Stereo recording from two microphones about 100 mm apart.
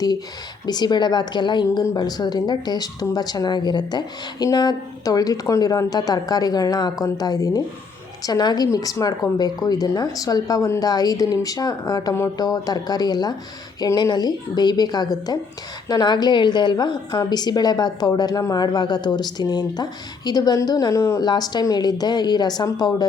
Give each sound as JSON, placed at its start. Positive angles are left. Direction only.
{"t": 0.6, "sound": "a woman's voice", "side_deg": 45}
{"t": 21.2, "sound": "a woman's voice", "side_deg": 45}